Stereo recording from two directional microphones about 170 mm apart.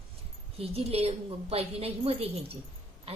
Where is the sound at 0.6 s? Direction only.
35° right (ahead or behind).